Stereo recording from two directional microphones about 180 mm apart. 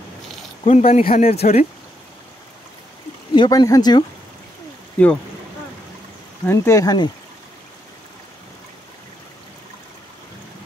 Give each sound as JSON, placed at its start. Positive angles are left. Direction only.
{"t": 0.7, "sound": "speech", "side_deg": 35}
{"t": 3.3, "sound": "speech", "side_deg": 20}
{"t": 4.9, "sound": "speech", "side_deg": 5}
{"t": 6.4, "sound": "speech", "side_deg": 15}